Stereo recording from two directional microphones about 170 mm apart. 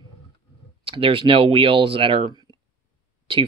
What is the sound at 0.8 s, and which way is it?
Speech, 30° right (ahead or behind).